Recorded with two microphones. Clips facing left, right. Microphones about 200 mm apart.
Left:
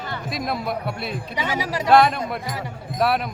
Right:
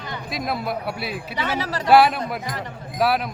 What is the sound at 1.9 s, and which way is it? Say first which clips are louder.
Speech: right 1 dB; 5° right (ahead or behind).